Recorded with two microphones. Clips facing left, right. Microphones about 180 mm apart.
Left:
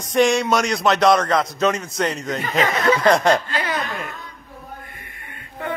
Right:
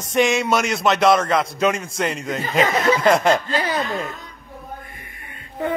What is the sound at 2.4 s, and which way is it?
Speech, 25° right (ahead or behind).